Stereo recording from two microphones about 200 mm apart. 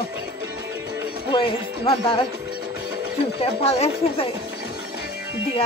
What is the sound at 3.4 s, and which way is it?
Speech, 30° left (ahead or behind).